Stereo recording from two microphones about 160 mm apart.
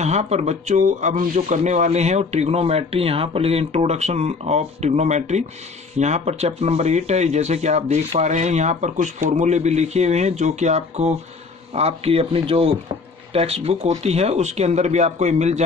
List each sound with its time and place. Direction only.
0.0 s speech: 45° right (ahead or behind)